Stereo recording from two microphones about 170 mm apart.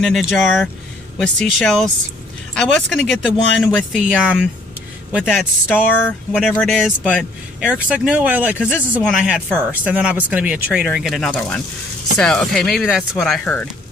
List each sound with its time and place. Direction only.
0.0 s speech: centre (ahead or behind)